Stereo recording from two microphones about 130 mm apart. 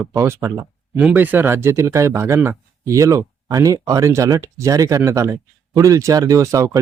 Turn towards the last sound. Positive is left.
turn(degrees=-25)  # may be behind; listen again after turning